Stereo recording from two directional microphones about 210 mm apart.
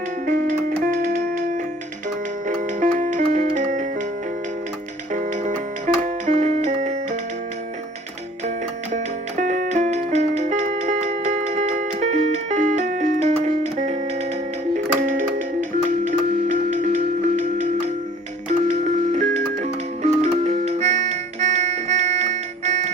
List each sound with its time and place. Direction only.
0.3 s music: 40° right (ahead or behind)
5.1 s music: 35° right (ahead or behind)
9.4 s music: 35° right (ahead or behind)
16.0 s music: 35° right (ahead or behind)